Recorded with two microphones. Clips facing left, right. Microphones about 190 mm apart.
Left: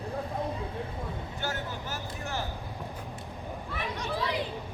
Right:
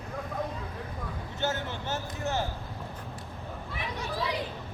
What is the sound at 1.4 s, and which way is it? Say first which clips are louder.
Speech: right 5 dB; 25° right (ahead or behind).